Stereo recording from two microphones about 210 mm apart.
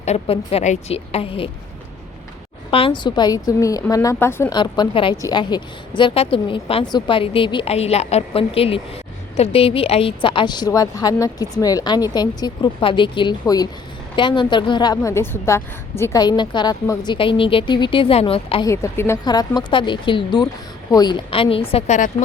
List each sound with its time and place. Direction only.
0.0 s a woman's voice: 30° left (ahead or behind)
2.6 s a woman's voice: 25° left (ahead or behind)
18.7 s a woman's voice: 15° left (ahead or behind); by 22.1 s 35° left (ahead or behind)